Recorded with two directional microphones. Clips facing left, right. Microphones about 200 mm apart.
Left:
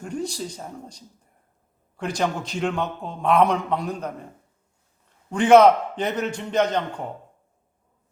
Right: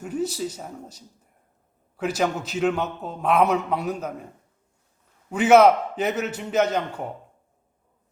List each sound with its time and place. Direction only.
0.0 s a man's voice: 5° right (ahead or behind)
5.3 s a man's voice: 5° right (ahead or behind)